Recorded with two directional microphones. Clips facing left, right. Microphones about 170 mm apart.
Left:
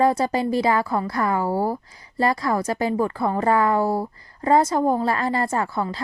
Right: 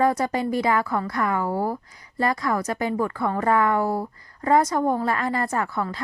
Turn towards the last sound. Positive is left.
turn(degrees=30)  # may be behind; listen again after turning